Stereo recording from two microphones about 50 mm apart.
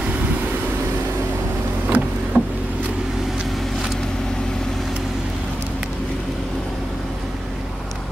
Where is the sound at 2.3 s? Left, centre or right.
Right.